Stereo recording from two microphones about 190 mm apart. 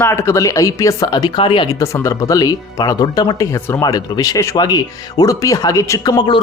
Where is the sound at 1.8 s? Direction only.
15° left (ahead or behind).